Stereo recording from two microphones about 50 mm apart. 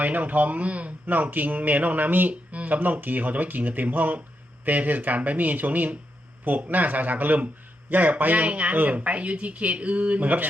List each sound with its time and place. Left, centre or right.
0.0 s speech: right